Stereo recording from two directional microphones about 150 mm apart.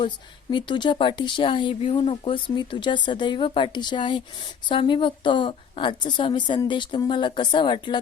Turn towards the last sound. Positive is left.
turn(degrees=35)  # may be behind; listen again after turning